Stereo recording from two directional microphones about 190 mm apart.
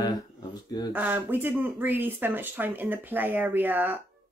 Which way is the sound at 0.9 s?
10° right (ahead or behind).